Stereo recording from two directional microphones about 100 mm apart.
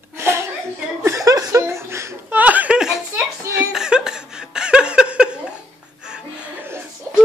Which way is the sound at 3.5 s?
5° right (ahead or behind).